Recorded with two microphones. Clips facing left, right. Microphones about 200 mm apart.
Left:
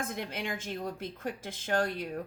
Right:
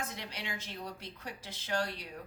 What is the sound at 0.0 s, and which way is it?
Speech, 50° left (ahead or behind).